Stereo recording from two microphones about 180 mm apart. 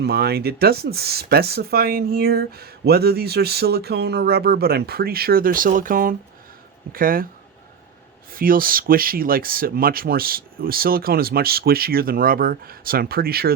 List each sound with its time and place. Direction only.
0.0 s speech: 65° right (ahead or behind)
8.3 s speech: 55° right (ahead or behind)